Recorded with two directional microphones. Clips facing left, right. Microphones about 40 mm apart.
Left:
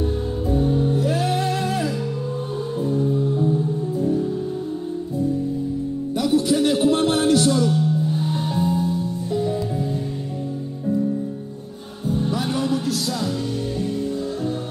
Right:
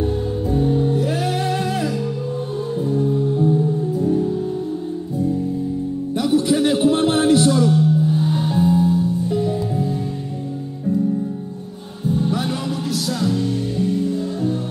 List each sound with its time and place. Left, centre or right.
0.9 s music: right
6.1 s music: centre